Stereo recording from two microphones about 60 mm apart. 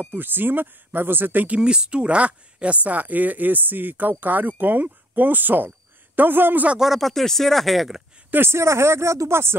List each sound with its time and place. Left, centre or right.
0.0 s speech: right
1.6 s speech: centre; by 6.7 s right
6.8 s speech: centre
8.3 s speech: right